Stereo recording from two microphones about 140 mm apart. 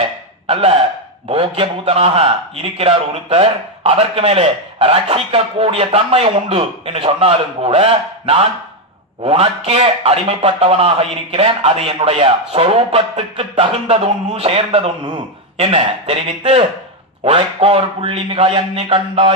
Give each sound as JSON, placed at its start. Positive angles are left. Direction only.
{"t": 0.5, "sound": "a man's voice", "side_deg": -50}